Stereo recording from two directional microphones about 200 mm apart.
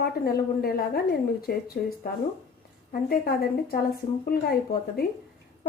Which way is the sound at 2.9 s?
50° left (ahead or behind).